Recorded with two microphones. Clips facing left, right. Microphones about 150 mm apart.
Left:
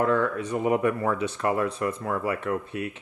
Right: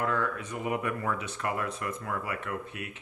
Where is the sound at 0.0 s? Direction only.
30° left (ahead or behind).